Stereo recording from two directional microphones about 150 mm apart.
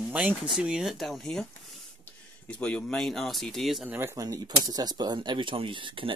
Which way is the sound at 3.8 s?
10° right (ahead or behind).